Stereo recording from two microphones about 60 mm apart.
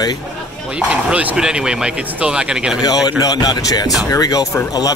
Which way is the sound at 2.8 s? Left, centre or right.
Left.